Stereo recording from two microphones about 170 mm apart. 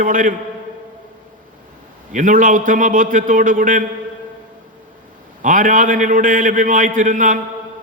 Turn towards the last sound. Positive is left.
turn(degrees=-50)  # may be behind; listen again after turning